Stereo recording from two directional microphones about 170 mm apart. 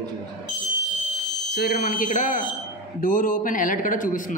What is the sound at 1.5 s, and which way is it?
A man's voice, 70° left (ahead or behind).